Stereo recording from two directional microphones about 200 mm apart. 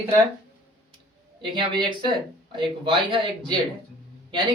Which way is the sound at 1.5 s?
20° right (ahead or behind).